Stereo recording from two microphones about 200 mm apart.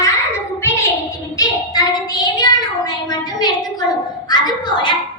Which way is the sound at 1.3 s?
20° left (ahead or behind).